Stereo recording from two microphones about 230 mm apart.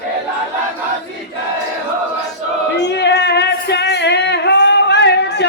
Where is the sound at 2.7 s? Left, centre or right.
Left.